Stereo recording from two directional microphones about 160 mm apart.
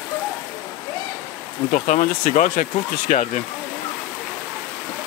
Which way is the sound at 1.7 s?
50° left (ahead or behind).